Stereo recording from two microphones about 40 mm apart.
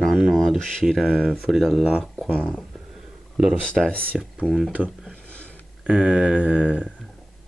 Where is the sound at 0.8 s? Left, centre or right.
Centre.